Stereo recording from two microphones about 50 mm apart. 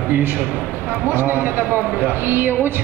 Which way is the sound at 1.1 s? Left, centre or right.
Right.